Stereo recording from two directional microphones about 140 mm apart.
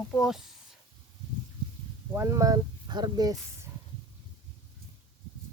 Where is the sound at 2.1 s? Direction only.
20° right (ahead or behind).